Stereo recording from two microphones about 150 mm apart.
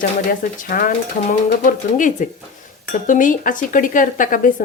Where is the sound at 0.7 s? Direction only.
70° left (ahead or behind).